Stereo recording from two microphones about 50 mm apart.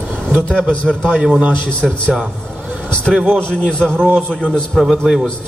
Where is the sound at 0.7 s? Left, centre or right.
Left.